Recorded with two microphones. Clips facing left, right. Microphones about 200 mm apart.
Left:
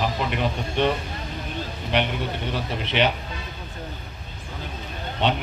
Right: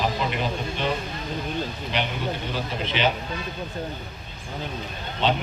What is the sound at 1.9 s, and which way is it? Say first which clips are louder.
Speech: left 3 dB; 65° left (ahead or behind).